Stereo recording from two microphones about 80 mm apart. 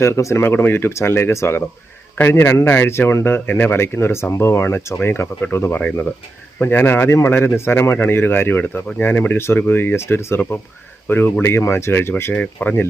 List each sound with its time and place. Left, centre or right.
0.0 s speech: left
12.3 s speech: centre